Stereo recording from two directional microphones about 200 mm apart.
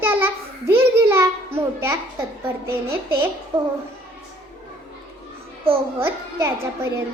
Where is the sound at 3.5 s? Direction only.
25° right (ahead or behind).